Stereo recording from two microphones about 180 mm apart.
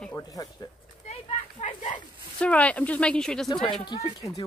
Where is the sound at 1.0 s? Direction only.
40° left (ahead or behind).